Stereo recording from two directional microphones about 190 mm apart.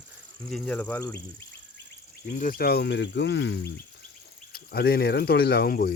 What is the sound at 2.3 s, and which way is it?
Speech, 45° left (ahead or behind).